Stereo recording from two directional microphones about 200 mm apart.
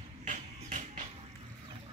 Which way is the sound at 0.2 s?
40° right (ahead or behind).